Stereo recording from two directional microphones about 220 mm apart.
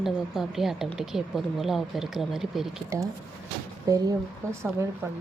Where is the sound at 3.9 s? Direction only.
15° right (ahead or behind).